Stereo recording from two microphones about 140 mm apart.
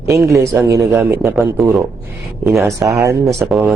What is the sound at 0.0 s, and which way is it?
A man's voice, 20° right (ahead or behind).